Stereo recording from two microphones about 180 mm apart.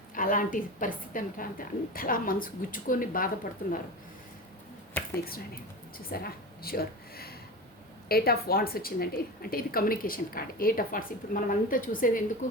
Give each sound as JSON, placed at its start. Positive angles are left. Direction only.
{"t": 0.1, "sound": "a woman's voice", "side_deg": 50}
{"t": 6.1, "sound": "a woman's voice", "side_deg": 55}